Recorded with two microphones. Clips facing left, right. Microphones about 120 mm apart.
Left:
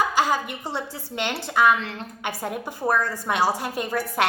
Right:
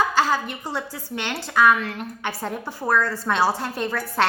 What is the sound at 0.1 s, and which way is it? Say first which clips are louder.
A woman's voice: right 1 dB; 15° left (ahead or behind).